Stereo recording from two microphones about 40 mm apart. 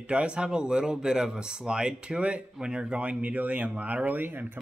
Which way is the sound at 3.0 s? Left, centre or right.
Right.